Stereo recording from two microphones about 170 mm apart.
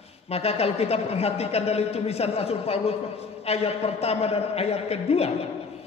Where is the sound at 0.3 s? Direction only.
35° left (ahead or behind).